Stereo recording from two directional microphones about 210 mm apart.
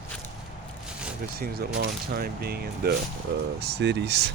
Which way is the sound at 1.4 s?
50° right (ahead or behind).